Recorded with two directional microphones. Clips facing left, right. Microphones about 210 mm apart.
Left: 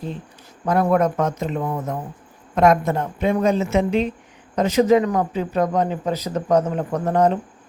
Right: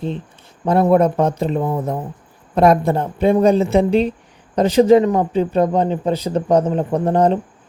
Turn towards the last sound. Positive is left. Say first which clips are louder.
# right 3 dB
turn(degrees=-30)  # may be behind; listen again after turning